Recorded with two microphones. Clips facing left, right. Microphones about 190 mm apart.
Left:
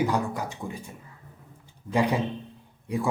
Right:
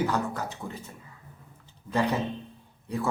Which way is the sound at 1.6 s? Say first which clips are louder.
Left 2 dB; 15° left (ahead or behind).